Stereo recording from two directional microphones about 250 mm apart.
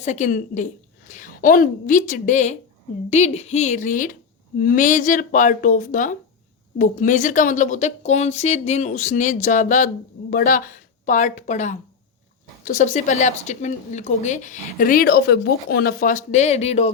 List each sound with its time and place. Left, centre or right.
0.0 s a woman's voice: left